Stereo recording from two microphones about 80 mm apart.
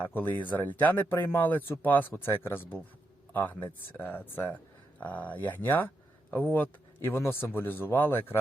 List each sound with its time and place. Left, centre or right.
0.1 s a man's voice: left